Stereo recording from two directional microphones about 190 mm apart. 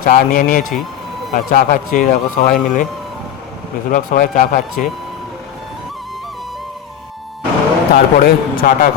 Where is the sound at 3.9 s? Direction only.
45° left (ahead or behind).